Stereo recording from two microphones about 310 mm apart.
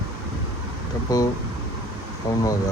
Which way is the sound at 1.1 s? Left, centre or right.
Centre.